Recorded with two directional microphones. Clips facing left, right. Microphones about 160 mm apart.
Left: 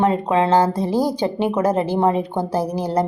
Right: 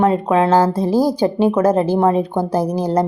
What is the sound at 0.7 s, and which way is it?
Speech, 10° right (ahead or behind).